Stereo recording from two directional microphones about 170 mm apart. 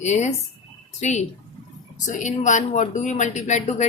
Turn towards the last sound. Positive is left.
turn(degrees=45)  # may be behind; listen again after turning